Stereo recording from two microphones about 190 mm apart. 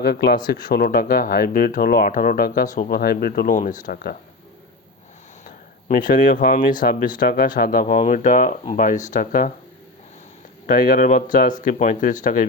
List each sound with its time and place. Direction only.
0.0 s speech: 55° left (ahead or behind)
5.9 s speech: 45° left (ahead or behind)
10.7 s speech: 50° left (ahead or behind)